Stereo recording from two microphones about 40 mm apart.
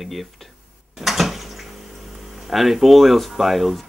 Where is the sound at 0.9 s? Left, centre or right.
Centre.